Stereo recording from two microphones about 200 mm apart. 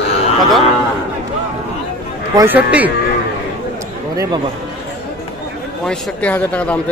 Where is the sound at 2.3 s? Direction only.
10° right (ahead or behind).